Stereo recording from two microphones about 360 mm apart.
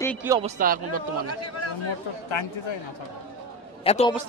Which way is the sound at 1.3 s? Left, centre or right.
Left.